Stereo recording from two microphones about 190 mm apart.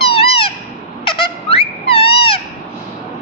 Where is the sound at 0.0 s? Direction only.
30° left (ahead or behind).